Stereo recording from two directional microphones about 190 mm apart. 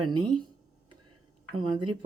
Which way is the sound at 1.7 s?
25° right (ahead or behind).